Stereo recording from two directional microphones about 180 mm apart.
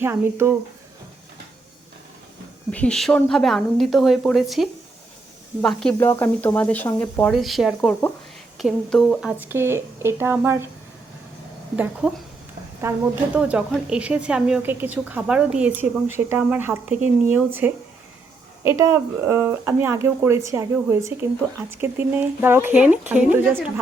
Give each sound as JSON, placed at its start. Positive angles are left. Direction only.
{"t": 0.0, "sound": "speech", "side_deg": -15}
{"t": 2.7, "sound": "speech", "side_deg": 5}
{"t": 9.4, "sound": "speech", "side_deg": -10}
{"t": 11.8, "sound": "speech", "side_deg": -5}